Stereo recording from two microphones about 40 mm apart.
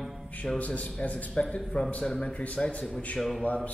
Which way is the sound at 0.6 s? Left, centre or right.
Left.